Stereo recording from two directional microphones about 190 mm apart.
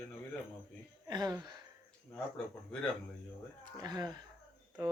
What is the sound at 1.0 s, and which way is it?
Speech, 20° right (ahead or behind).